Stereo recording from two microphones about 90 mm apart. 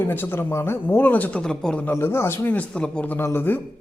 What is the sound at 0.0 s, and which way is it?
Speech, 25° left (ahead or behind).